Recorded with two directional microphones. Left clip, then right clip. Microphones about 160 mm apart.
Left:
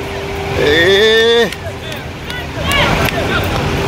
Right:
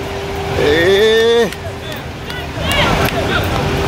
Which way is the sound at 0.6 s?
10° right (ahead or behind).